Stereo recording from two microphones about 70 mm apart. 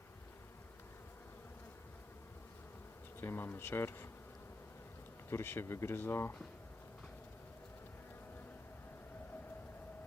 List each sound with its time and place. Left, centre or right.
3.2 s speech: left
5.3 s speech: left